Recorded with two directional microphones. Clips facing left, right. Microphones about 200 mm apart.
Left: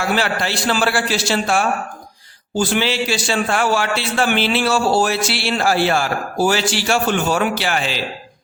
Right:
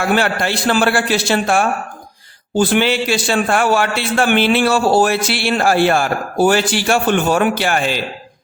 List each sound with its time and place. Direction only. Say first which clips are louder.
0.1 s a man's voice: right 3 dB; 50° right (ahead or behind)